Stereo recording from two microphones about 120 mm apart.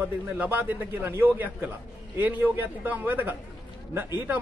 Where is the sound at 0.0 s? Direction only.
15° right (ahead or behind).